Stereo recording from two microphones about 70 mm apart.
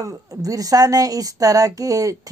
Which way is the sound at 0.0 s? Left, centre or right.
Right.